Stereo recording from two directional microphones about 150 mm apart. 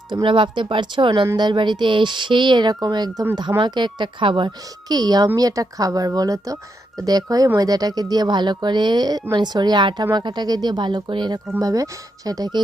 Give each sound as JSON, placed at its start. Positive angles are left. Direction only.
{"t": 0.1, "sound": "speech", "side_deg": -35}